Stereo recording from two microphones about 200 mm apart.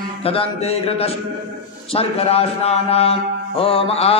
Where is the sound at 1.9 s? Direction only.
30° left (ahead or behind).